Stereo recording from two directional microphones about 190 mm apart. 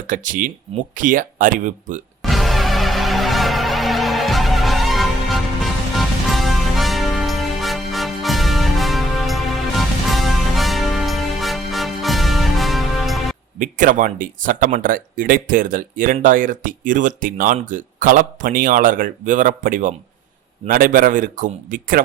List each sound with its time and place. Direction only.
0.1 s speech: 45° right (ahead or behind)
2.2 s music: centre (ahead or behind)
13.6 s speech: 45° right (ahead or behind)